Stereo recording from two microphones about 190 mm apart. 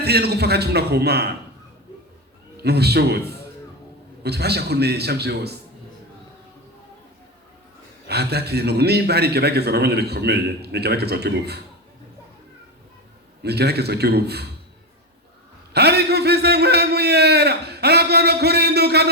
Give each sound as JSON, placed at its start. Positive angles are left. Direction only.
{"t": 0.0, "sound": "a man's voice", "side_deg": -60}
{"t": 2.6, "sound": "a man's voice", "side_deg": -60}
{"t": 8.0, "sound": "a man's voice", "side_deg": -60}
{"t": 13.4, "sound": "a man's voice", "side_deg": -60}
{"t": 15.7, "sound": "a man's voice", "side_deg": -60}